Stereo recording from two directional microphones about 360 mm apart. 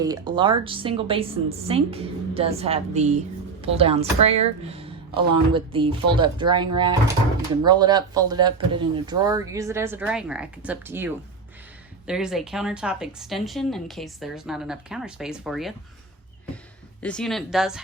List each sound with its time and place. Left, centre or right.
0.0 s a woman's voice: centre
17.0 s a woman's voice: centre